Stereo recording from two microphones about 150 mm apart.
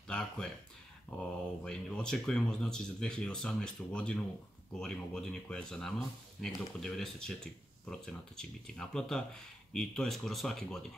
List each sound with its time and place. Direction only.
0.1 s speech: 5° left (ahead or behind)